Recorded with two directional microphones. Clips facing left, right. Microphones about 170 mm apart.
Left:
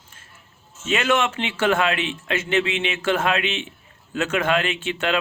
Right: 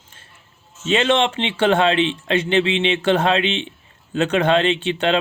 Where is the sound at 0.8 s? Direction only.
25° right (ahead or behind).